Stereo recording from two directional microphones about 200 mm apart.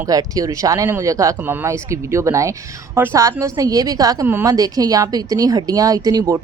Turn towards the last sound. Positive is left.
turn(degrees=-15)  # may be behind; listen again after turning